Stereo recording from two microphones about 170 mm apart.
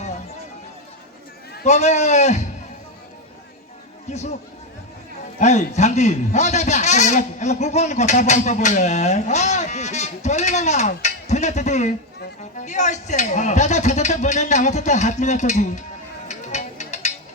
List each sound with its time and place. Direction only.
1.6 s a man's voice: 40° left (ahead or behind)
4.1 s speech: 40° left (ahead or behind)
5.4 s a man's voice: 40° left (ahead or behind)
16.3 s music: 45° left (ahead or behind)